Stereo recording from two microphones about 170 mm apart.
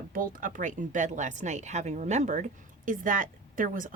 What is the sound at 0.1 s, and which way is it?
Speech, 55° right (ahead or behind).